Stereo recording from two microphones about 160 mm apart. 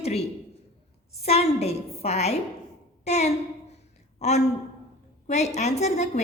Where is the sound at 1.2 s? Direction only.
40° left (ahead or behind).